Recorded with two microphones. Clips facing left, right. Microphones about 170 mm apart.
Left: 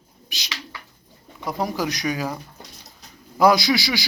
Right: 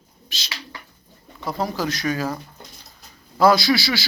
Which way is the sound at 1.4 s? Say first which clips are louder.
Even; 15° left (ahead or behind).